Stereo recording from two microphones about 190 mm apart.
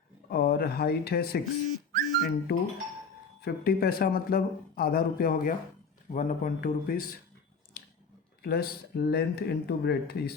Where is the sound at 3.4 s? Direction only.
55° left (ahead or behind).